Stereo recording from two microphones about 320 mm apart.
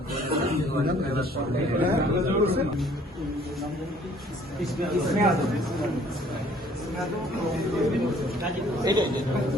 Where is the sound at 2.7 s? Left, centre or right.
Centre.